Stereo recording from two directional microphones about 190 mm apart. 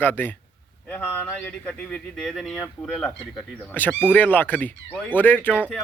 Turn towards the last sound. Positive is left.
turn(degrees=10)  # may be behind; listen again after turning